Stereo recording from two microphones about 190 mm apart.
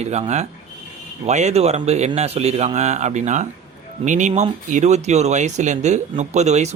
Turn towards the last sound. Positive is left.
turn(degrees=-35)  # may be behind; listen again after turning